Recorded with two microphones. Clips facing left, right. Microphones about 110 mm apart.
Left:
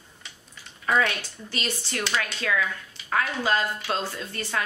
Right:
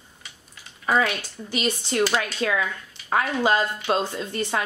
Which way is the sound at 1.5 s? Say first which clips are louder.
Right 6 dB; 15° right (ahead or behind).